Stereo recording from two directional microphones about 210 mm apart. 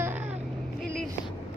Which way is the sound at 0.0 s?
10° right (ahead or behind).